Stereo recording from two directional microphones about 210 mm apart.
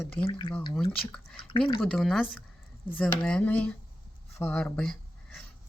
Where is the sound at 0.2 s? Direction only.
25° left (ahead or behind).